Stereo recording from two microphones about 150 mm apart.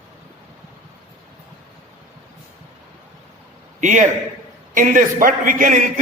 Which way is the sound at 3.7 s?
55° right (ahead or behind).